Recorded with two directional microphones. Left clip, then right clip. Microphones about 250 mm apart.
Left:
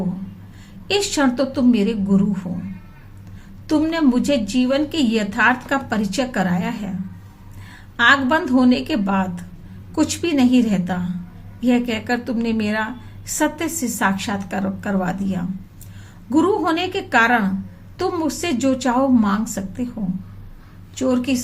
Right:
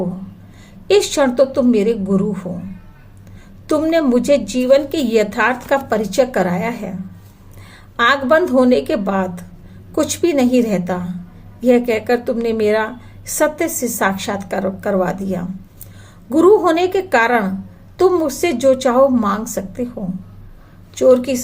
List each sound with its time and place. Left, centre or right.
0.9 s a woman's voice: centre
3.7 s a woman's voice: centre
7.9 s a woman's voice: centre
21.0 s a woman's voice: centre